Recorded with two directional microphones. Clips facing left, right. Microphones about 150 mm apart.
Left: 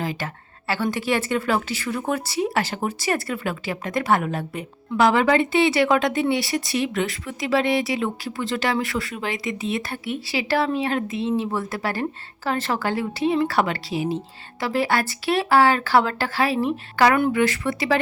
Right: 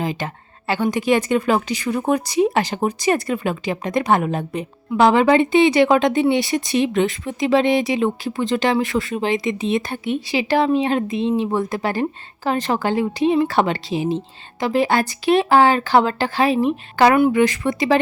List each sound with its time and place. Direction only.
0.0 s speech: 20° right (ahead or behind)